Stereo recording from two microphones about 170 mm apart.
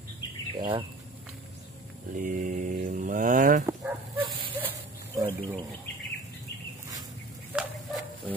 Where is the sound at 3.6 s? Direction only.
20° right (ahead or behind).